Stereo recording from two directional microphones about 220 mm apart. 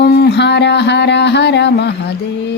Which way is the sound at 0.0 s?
50° left (ahead or behind).